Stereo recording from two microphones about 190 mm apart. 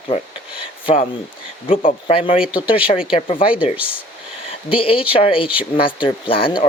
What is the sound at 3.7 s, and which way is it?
Speech, 10° right (ahead or behind).